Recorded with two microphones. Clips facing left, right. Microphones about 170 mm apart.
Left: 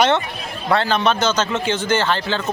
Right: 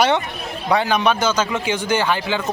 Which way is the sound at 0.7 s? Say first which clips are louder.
Even; 15° right (ahead or behind).